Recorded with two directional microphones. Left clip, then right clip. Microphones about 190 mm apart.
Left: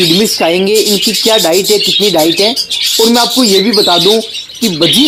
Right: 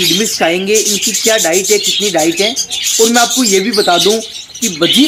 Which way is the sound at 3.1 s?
15° left (ahead or behind).